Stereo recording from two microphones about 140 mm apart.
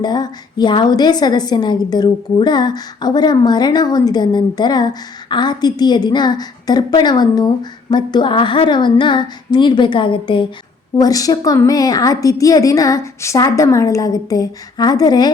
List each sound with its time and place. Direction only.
0.0 s a woman's voice: 30° left (ahead or behind)